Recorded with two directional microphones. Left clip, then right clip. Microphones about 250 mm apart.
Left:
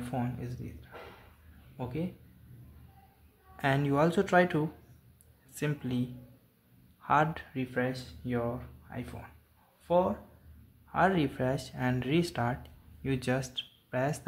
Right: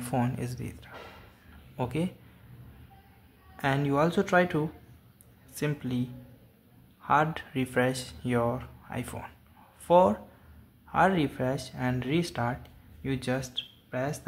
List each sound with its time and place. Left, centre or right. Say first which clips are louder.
0.0 s speech: right 6 dB; centre
3.5 s speech: right 1 dB; centre
7.5 s speech: right 8 dB; centre
10.9 s speech: right 3 dB; centre